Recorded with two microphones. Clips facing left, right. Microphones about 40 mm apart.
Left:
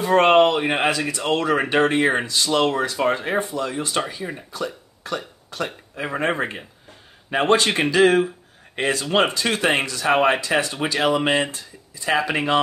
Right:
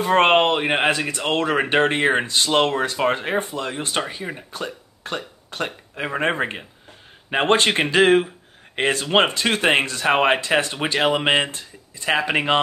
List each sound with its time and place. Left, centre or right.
0.0 s speech: right
6.1 s speech: right